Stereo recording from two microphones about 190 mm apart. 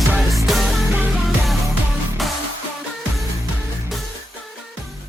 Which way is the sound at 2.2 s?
Centre (ahead or behind).